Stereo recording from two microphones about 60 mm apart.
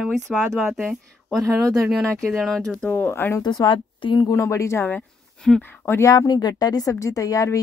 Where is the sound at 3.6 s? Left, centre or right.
Left.